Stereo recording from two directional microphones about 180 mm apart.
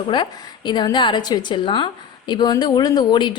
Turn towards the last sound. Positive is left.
turn(degrees=25)  # may be behind; listen again after turning